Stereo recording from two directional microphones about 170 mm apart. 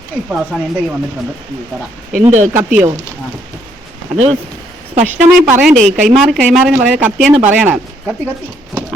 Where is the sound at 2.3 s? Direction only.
45° right (ahead or behind).